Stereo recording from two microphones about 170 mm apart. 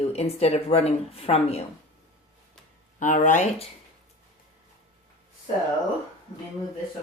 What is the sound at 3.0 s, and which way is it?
Speech, 45° left (ahead or behind).